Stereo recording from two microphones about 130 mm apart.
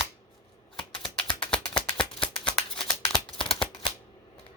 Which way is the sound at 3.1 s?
35° left (ahead or behind).